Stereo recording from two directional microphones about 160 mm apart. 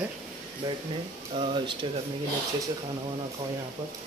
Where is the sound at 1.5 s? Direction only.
30° right (ahead or behind).